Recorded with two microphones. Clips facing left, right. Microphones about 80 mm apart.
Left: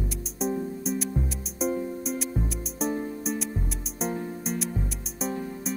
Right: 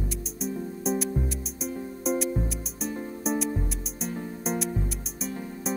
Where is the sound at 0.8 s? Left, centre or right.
Centre.